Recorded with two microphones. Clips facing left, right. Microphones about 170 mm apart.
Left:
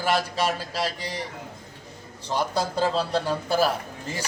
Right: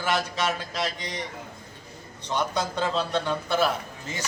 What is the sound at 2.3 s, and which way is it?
A man's voice, 30° left (ahead or behind).